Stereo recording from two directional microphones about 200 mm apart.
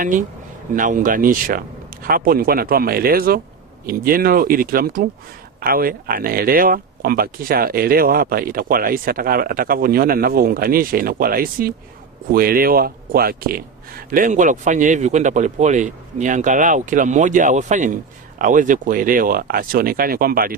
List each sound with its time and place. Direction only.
0.0 s speech: 40° right (ahead or behind)